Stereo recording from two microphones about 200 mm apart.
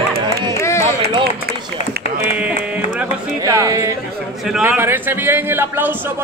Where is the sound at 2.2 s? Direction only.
5° right (ahead or behind).